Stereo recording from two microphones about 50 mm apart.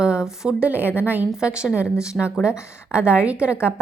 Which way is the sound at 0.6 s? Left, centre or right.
Right.